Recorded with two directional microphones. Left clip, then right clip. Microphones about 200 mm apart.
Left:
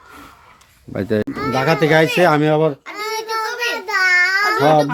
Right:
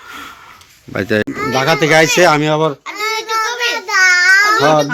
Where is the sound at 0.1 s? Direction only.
Centre (ahead or behind).